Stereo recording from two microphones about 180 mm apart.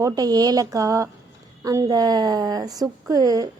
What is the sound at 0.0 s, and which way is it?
A woman's voice, 20° right (ahead or behind).